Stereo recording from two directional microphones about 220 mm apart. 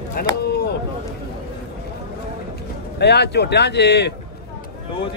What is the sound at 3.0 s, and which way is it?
Speech, 50° left (ahead or behind).